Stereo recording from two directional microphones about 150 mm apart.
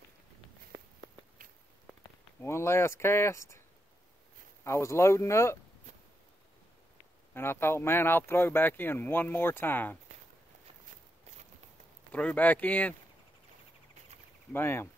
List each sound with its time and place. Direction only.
2.4 s speech: 20° left (ahead or behind)
4.6 s speech: 20° left (ahead or behind)
7.3 s speech: 15° left (ahead or behind)
12.1 s speech: 10° left (ahead or behind)
14.5 s speech: 15° left (ahead or behind)